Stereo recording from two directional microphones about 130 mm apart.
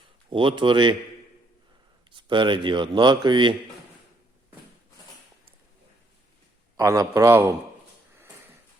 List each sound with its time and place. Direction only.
0.3 s speech: 40° right (ahead or behind)
2.0 s speech: 40° right (ahead or behind)
6.8 s a man's voice: 25° right (ahead or behind)